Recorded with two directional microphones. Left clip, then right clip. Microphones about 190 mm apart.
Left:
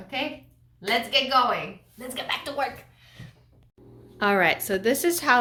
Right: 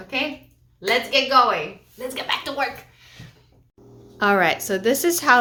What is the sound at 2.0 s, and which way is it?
A woman's voice, 20° right (ahead or behind).